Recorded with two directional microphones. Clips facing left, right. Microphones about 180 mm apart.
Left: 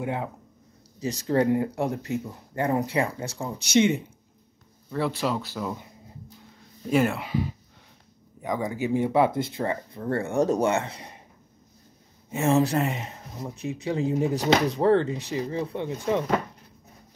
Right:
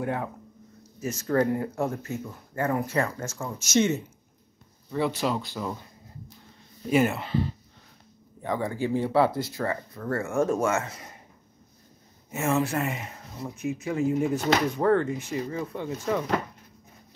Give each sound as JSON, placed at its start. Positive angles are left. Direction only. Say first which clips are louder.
{"t": 0.0, "sound": "speech", "louder": "even", "side_deg": 20}
{"t": 4.9, "sound": "speech", "louder": "even", "side_deg": 0}
{"t": 6.9, "sound": "speech", "louder": "even", "side_deg": -5}
{"t": 7.2, "sound": "speech", "louder": "even", "side_deg": 10}
{"t": 12.3, "sound": "speech", "louder": "left 4 dB", "side_deg": 30}
{"t": 12.8, "sound": "speech", "louder": "left 2 dB", "side_deg": 25}